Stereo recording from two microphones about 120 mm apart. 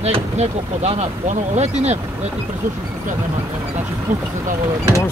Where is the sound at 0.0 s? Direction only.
65° right (ahead or behind).